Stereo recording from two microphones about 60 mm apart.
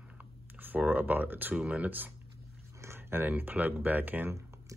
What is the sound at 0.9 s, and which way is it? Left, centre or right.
Speech, right.